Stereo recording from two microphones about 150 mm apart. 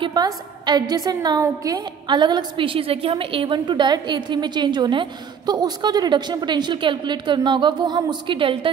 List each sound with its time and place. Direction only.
0.0 s a woman's voice: 30° right (ahead or behind)